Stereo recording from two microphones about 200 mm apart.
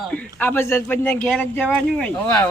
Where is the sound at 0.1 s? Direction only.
10° left (ahead or behind).